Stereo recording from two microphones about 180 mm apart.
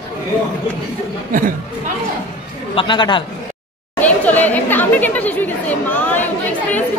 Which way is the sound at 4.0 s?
10° left (ahead or behind).